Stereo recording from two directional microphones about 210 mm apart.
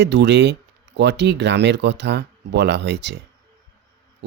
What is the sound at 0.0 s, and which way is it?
Speech, 55° right (ahead or behind).